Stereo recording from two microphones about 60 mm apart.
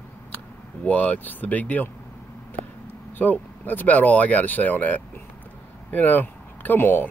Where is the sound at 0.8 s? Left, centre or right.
Left.